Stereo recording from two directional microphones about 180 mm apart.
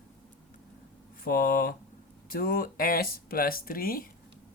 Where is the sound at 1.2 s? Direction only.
55° left (ahead or behind).